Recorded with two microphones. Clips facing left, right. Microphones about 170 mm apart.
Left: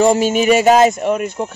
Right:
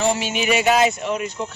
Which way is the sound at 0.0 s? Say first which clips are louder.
Left 9 dB; 45° left (ahead or behind).